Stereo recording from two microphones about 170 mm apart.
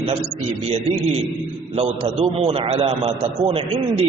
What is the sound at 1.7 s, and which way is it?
A man's voice, 35° right (ahead or behind).